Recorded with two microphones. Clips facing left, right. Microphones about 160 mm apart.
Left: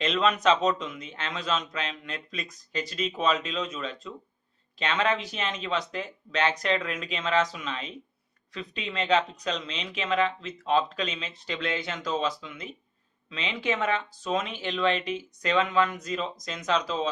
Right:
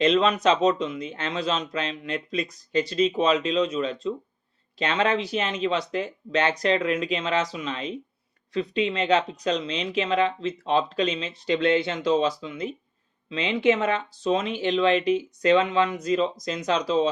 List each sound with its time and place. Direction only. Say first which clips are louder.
0.0 s a man's voice: right 4 dB; 35° right (ahead or behind)